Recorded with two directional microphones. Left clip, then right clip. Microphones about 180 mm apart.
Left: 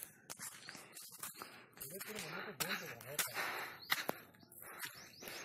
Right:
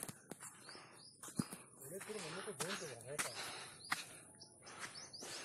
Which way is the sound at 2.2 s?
10° left (ahead or behind).